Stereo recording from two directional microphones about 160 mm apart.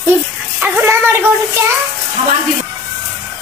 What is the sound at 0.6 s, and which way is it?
Speech, 10° right (ahead or behind).